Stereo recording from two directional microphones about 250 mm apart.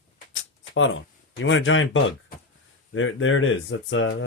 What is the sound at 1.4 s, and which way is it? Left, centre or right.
Speech, left.